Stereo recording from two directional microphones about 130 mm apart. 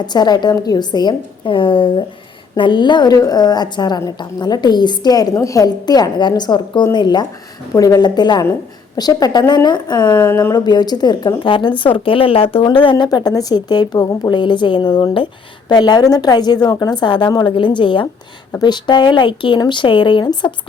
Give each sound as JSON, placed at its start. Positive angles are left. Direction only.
{"t": 0.0, "sound": "speech", "side_deg": 35}
{"t": 10.2, "sound": "speech", "side_deg": 20}